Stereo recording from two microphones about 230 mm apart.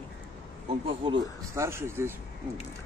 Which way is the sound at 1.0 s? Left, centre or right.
Centre.